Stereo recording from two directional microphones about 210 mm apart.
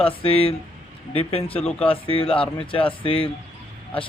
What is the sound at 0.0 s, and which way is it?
Speech, 25° left (ahead or behind).